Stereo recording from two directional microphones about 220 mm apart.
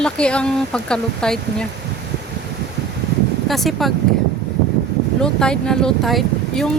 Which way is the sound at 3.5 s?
Centre (ahead or behind).